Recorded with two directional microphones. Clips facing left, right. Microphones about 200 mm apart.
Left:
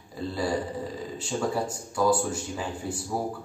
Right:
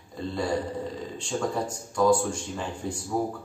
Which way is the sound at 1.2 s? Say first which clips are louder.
Even; 5° left (ahead or behind).